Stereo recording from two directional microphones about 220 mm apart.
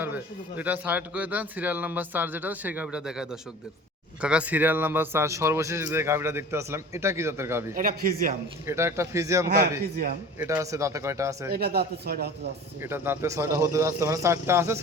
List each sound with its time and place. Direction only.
0.0 s speech: 10° right (ahead or behind)
7.8 s a man's voice: 40° right (ahead or behind)
8.6 s speech: 10° right (ahead or behind)
11.5 s a man's voice: 45° right (ahead or behind)
12.8 s speech: 10° right (ahead or behind)